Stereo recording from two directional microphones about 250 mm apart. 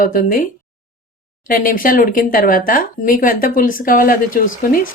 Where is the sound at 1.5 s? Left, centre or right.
Left.